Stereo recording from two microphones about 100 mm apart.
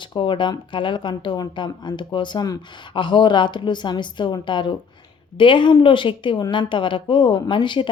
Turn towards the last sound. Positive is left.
turn(degrees=55)  # may be behind; listen again after turning